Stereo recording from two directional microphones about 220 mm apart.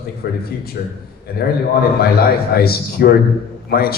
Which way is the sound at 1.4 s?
45° left (ahead or behind).